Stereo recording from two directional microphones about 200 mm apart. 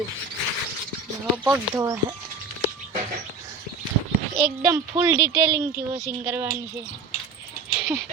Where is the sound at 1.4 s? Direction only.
10° right (ahead or behind).